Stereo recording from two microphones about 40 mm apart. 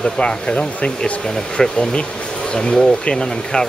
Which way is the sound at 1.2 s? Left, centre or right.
Centre.